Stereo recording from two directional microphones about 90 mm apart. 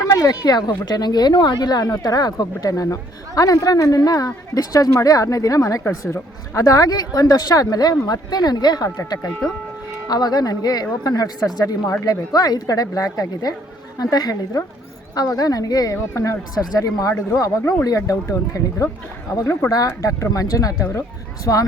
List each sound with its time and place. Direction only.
0.1 s a woman's voice: 40° left (ahead or behind)